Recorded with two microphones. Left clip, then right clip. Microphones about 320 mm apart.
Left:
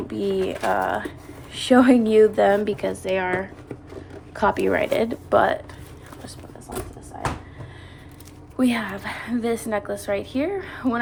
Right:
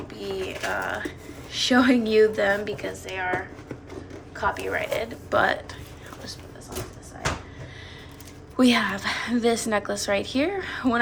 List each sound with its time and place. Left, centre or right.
0.1 s speech: centre
8.5 s a woman's voice: centre